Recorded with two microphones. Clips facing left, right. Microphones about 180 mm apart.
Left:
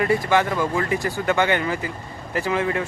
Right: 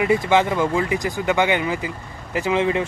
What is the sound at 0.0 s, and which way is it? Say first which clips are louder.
A man's voice: right 2 dB; 20° right (ahead or behind).